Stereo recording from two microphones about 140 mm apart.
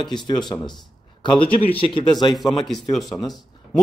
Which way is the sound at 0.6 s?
35° left (ahead or behind).